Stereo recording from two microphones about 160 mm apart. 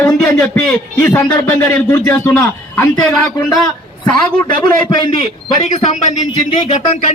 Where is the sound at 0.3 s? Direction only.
5° left (ahead or behind).